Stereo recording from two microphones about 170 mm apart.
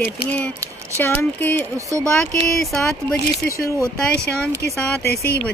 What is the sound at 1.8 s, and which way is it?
Speech, 20° right (ahead or behind).